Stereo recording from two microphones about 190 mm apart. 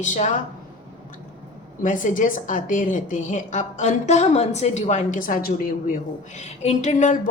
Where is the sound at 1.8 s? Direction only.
45° left (ahead or behind).